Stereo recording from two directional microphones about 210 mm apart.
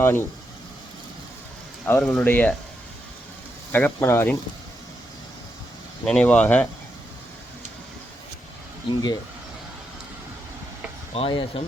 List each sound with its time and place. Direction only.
0.0 s speech: 10° left (ahead or behind)
1.9 s speech: 5° left (ahead or behind)
3.7 s speech: 10° left (ahead or behind)
6.1 s speech: 5° left (ahead or behind)
8.9 s speech: 20° left (ahead or behind)
11.1 s speech: 25° left (ahead or behind)